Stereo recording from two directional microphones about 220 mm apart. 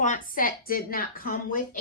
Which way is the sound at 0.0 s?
35° left (ahead or behind).